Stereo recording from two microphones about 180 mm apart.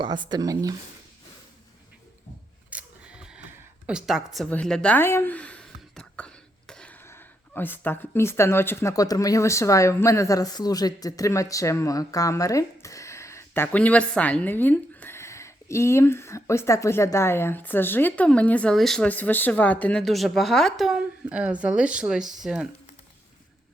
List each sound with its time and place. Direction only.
0.0 s speech: 25° right (ahead or behind)
2.6 s speech: 5° right (ahead or behind)